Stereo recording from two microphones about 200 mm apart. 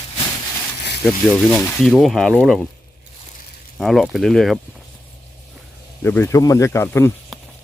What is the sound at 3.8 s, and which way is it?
Speech, centre (ahead or behind).